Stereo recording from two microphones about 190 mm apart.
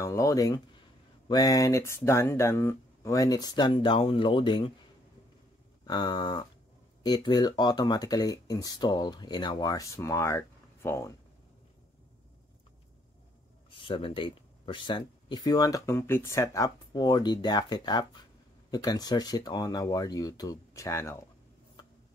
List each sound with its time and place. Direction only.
0.0 s speech: 15° left (ahead or behind)
5.9 s speech: 20° left (ahead or behind)
13.7 s speech: 25° left (ahead or behind)
21.8 s a sound: 25° left (ahead or behind)